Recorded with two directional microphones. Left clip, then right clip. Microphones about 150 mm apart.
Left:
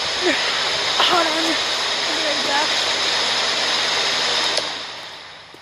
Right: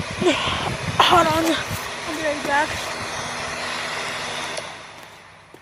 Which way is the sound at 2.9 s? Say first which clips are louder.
Left 9 dB; 25° left (ahead or behind).